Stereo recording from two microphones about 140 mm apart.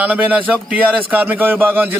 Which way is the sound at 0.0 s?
10° right (ahead or behind).